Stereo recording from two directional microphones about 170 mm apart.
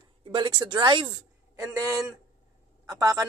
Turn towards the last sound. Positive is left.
turn(degrees=-20)  # may be behind; listen again after turning